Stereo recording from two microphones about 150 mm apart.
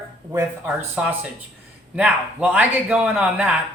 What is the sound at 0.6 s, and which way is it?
Speech, 10° right (ahead or behind).